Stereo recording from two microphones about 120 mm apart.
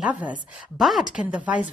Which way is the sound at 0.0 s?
10° right (ahead or behind).